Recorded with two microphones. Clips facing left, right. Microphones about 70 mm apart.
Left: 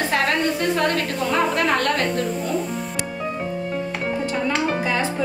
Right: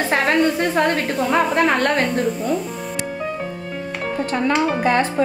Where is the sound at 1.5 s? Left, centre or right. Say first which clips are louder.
Right 3 dB; right.